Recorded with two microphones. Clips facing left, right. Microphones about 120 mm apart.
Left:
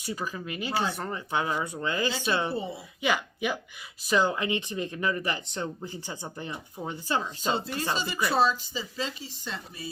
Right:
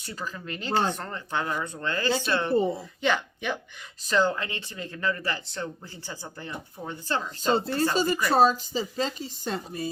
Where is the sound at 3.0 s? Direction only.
10° left (ahead or behind).